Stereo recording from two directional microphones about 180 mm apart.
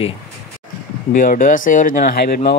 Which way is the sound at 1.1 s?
50° left (ahead or behind).